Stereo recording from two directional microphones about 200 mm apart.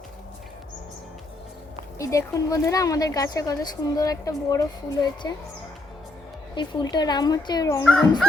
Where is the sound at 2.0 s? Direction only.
15° left (ahead or behind).